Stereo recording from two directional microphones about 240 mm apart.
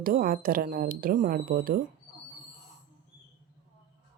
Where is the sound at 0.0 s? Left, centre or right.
Right.